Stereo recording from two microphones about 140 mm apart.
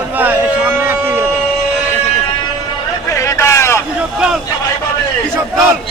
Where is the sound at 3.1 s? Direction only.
20° left (ahead or behind).